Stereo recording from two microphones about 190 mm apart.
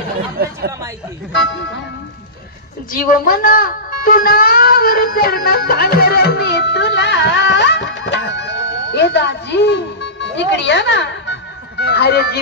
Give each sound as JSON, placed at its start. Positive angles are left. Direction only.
{"t": 2.9, "sound": "speech", "side_deg": 45}